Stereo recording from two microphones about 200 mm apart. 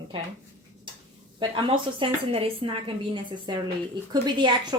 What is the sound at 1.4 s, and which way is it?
Speech, 25° right (ahead or behind).